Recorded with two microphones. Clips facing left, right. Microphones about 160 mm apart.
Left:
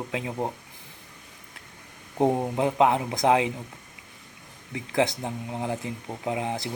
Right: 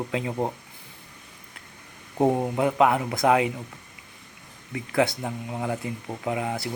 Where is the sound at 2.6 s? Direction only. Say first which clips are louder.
Even; 25° left (ahead or behind).